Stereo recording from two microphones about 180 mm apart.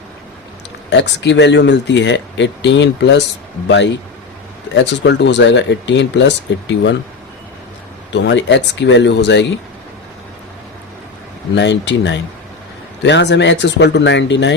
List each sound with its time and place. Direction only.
0.9 s speech: 85° left
4.7 s speech: 80° left
8.1 s speech: 80° left
11.5 s speech: 80° left